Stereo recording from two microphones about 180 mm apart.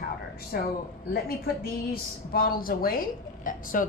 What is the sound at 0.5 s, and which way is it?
A woman's voice, 60° left (ahead or behind).